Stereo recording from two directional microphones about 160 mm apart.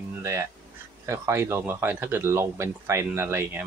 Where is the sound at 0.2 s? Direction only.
15° right (ahead or behind).